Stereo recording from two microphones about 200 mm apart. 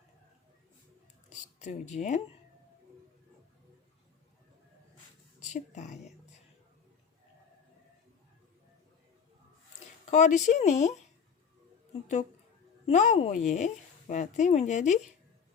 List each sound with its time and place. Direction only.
1.5 s speech: 35° left (ahead or behind)
5.4 s speech: 35° left (ahead or behind)
10.1 s speech: 35° left (ahead or behind)
12.8 s speech: 35° left (ahead or behind)